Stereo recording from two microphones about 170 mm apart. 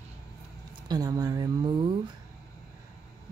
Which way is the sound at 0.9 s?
20° right (ahead or behind).